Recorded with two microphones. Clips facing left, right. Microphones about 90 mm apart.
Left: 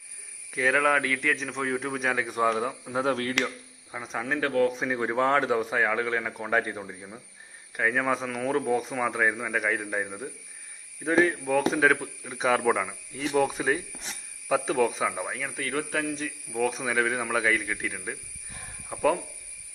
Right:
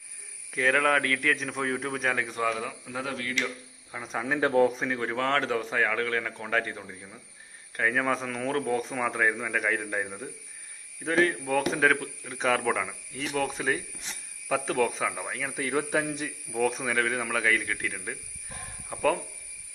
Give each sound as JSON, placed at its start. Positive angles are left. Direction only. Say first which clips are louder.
{"t": 0.5, "sound": "speech", "louder": "left 1 dB", "side_deg": 5}
{"t": 2.3, "sound": "speech", "louder": "left 4 dB", "side_deg": 25}
{"t": 3.1, "sound": "speech", "louder": "left 8 dB", "side_deg": 40}
{"t": 3.9, "sound": "speech", "louder": "even", "side_deg": 0}
{"t": 4.4, "sound": "speech", "louder": "right 2 dB", "side_deg": -20}
{"t": 4.7, "sound": "speech", "louder": "left 1 dB", "side_deg": 5}
{"t": 4.9, "sound": "a man's voice", "louder": "left 7 dB", "side_deg": 15}
{"t": 7.8, "sound": "speech", "louder": "left 1 dB", "side_deg": 5}
{"t": 16.5, "sound": "speech", "louder": "even", "side_deg": 0}